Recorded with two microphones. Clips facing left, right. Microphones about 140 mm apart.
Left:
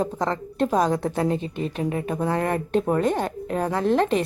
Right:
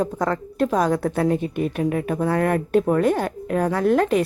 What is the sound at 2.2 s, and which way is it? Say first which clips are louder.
Speech: right 3 dB; 15° left (ahead or behind).